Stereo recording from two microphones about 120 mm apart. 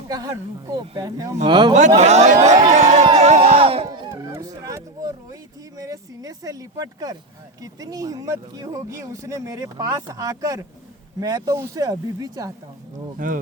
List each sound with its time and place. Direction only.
0.1 s speech: 35° right (ahead or behind)
1.5 s speech: 40° right (ahead or behind)
2.0 s speech: 70° right (ahead or behind)
2.7 s a sound: 75° right (ahead or behind)
3.2 s music: 70° right (ahead or behind); by 3.8 s 50° right (ahead or behind)
3.8 s a sound: 35° right (ahead or behind)
4.2 s speech: 30° right (ahead or behind)